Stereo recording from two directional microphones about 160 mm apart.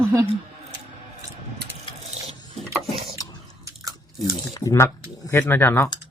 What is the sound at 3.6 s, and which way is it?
Biting, 25° right (ahead or behind).